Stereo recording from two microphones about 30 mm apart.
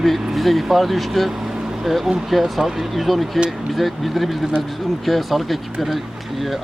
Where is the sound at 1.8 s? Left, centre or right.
Centre.